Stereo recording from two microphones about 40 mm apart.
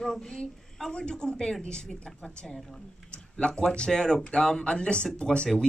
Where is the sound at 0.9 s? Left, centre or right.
Left.